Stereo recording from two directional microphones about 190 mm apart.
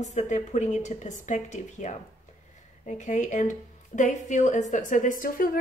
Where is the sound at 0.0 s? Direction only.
40° left (ahead or behind).